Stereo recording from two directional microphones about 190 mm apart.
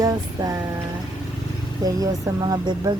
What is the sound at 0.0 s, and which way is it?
Music, 20° right (ahead or behind).